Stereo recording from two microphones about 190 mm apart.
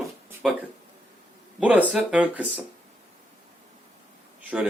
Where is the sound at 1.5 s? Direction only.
5° right (ahead or behind).